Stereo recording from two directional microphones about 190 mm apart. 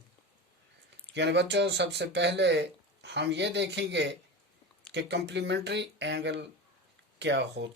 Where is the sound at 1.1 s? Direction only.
65° right (ahead or behind).